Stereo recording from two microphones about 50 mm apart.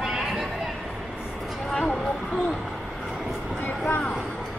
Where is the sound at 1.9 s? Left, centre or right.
Centre.